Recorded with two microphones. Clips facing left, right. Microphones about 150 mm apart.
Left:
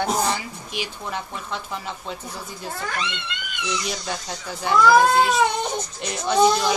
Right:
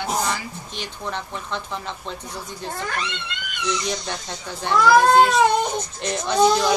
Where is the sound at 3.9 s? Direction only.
5° left (ahead or behind).